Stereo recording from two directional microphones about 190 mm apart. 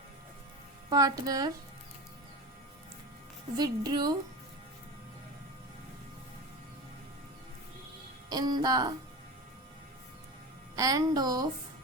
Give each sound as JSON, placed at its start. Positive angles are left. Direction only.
{"t": 0.9, "sound": "a woman's voice", "side_deg": -20}
{"t": 3.6, "sound": "a woman's voice", "side_deg": -20}
{"t": 8.3, "sound": "a woman's voice", "side_deg": -20}
{"t": 10.8, "sound": "a woman's voice", "side_deg": -20}